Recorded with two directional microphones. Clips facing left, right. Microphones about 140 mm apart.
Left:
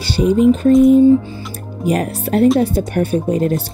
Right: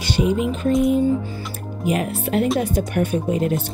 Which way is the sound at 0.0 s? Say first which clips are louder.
Left 7 dB; 35° left (ahead or behind).